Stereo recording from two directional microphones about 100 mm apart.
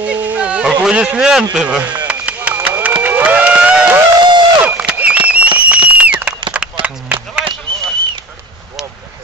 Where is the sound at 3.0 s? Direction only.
15° right (ahead or behind).